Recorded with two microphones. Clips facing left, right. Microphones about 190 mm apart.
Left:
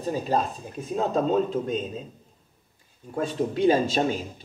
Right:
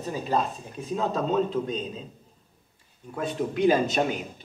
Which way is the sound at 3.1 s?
30° left (ahead or behind).